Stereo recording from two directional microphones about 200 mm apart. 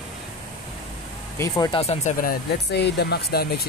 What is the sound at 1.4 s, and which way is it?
Speech, 20° left (ahead or behind).